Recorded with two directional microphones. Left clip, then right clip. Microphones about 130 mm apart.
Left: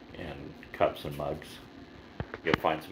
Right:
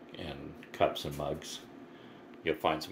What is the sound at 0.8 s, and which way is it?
Speech, 25° right (ahead or behind).